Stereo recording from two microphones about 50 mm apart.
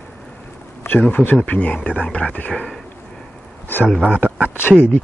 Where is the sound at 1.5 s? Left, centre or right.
Left.